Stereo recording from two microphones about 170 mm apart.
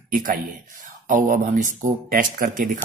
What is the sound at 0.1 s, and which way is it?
A man's voice, 55° right (ahead or behind).